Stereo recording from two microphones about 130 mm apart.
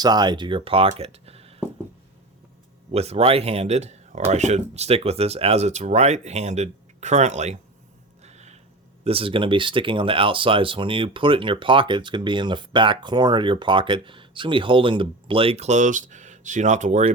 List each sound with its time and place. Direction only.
0.0 s speech: 35° right (ahead or behind); by 1.6 s 50° right (ahead or behind)
2.9 s speech: 55° right (ahead or behind)
8.2 s music: 60° right (ahead or behind)
9.0 s speech: 45° right (ahead or behind); by 17.1 s 65° right (ahead or behind)